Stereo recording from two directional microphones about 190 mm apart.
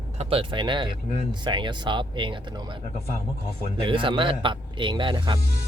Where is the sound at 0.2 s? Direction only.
30° right (ahead or behind).